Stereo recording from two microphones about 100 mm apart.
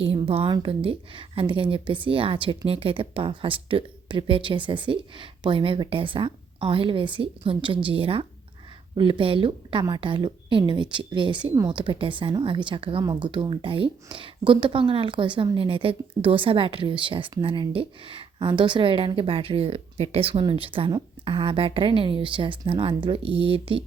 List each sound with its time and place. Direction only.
0.0 s a woman's voice: 75° right (ahead or behind)
0.4 s speech: 55° right (ahead or behind)
2.6 s speech: 70° right (ahead or behind)
20.4 s speech: 60° right (ahead or behind)